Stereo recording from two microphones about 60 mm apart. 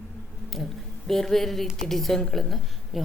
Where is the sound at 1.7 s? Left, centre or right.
Centre.